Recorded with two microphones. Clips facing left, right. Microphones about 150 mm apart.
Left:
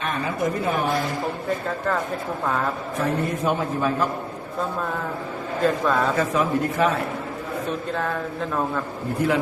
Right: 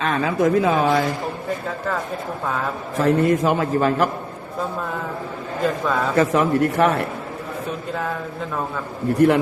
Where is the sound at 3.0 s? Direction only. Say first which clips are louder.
Right 7 dB; 90° right.